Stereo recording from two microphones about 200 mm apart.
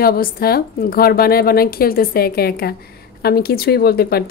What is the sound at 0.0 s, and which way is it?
A woman's voice, 50° left (ahead or behind).